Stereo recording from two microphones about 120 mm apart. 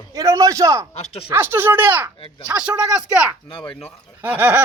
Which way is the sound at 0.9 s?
60° left (ahead or behind).